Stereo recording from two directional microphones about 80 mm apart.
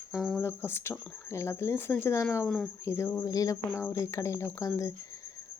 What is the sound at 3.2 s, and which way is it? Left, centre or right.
Speech, left.